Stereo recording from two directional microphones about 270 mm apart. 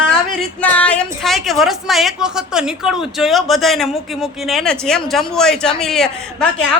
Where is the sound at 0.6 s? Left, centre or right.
Centre.